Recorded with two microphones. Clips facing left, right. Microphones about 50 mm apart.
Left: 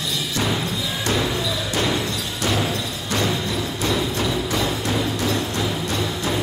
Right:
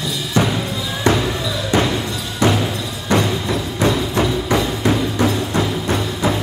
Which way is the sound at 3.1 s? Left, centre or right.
Right.